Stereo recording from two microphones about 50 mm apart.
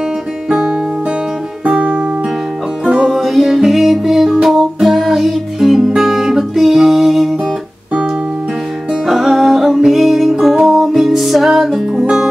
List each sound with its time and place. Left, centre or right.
0.5 s guitar: centre
1.6 s music: right
2.8 s music: centre
9.0 s music: centre